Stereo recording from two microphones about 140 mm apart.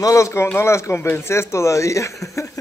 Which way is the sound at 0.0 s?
20° left (ahead or behind).